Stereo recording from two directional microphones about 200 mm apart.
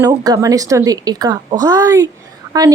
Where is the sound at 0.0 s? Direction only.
20° right (ahead or behind).